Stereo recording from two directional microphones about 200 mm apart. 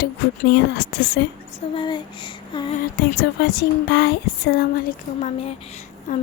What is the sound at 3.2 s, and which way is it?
A woman's voice, 55° left (ahead or behind).